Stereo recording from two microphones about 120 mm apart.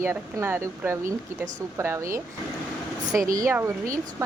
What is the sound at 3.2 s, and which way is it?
Speech, 25° right (ahead or behind).